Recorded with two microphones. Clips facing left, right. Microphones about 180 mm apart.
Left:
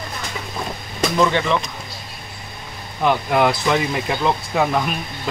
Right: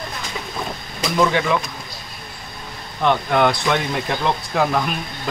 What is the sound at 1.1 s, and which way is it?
Speech, 5° right (ahead or behind).